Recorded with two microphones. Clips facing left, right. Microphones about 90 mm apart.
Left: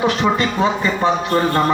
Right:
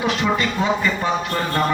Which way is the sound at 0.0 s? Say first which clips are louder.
Left 3 dB; 30° left (ahead or behind).